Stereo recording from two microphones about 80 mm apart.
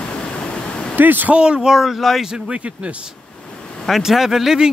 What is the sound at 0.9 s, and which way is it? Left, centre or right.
Speech, right.